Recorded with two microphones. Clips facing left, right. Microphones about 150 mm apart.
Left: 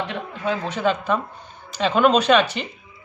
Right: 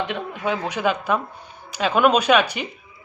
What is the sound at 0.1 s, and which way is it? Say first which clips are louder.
A woman's voice: right 1 dB; 15° right (ahead or behind).